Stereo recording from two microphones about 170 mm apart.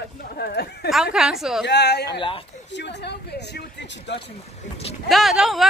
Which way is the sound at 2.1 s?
30° left (ahead or behind).